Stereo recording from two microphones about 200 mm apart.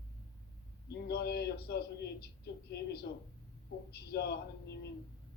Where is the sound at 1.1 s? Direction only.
55° left (ahead or behind).